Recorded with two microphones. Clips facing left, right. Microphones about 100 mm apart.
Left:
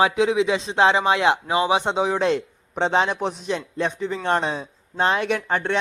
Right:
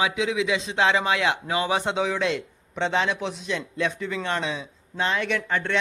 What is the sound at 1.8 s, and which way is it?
Speech, 35° left (ahead or behind).